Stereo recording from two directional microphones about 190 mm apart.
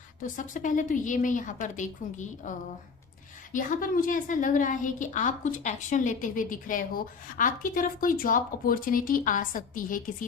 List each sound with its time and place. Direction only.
0.2 s a woman's voice: 45° left (ahead or behind)